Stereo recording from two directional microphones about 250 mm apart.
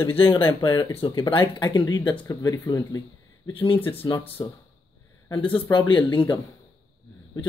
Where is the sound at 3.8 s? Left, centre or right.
Centre.